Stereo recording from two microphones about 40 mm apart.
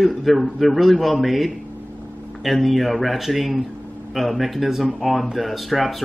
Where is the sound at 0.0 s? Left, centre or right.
Centre.